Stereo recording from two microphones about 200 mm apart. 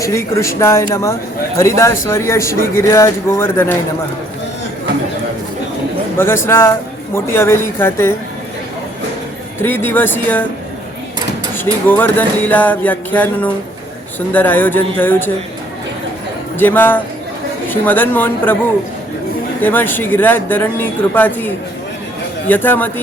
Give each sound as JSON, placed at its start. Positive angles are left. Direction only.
{"t": 0.0, "sound": "a man's voice", "side_deg": 15}
{"t": 6.1, "sound": "a man's voice", "side_deg": 10}
{"t": 9.6, "sound": "a man's voice", "side_deg": 10}
{"t": 11.5, "sound": "a man's voice", "side_deg": 10}
{"t": 16.6, "sound": "a man's voice", "side_deg": 10}
{"t": 19.6, "sound": "a man's voice", "side_deg": 10}